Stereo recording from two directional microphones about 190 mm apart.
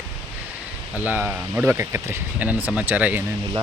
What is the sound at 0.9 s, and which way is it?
Speech, 10° right (ahead or behind).